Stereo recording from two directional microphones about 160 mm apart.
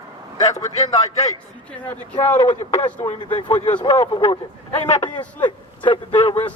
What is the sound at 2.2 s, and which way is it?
Speech, 15° left (ahead or behind).